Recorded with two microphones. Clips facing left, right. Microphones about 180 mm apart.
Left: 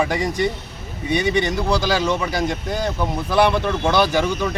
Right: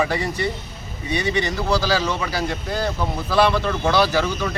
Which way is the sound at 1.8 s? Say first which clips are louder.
Left 1 dB; 15° left (ahead or behind).